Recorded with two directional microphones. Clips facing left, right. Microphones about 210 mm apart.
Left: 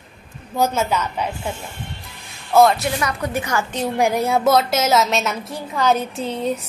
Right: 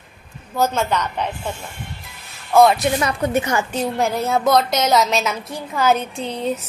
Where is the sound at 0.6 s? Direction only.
5° left (ahead or behind).